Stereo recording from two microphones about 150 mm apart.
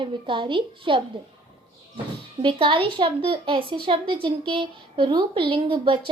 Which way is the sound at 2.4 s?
35° right (ahead or behind).